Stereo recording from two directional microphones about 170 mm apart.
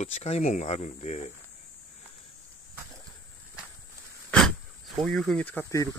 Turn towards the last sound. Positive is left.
turn(degrees=15)  # may be behind; listen again after turning